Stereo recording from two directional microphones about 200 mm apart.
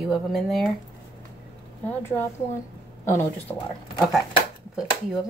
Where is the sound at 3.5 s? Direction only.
15° left (ahead or behind).